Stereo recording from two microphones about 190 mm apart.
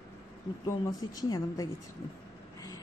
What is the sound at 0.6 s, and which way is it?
A woman's voice, 20° left (ahead or behind).